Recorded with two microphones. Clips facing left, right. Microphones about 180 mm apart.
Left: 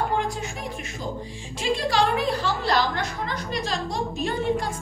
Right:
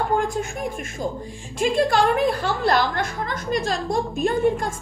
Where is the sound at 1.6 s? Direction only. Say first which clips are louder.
Right 4 dB; 50° right (ahead or behind).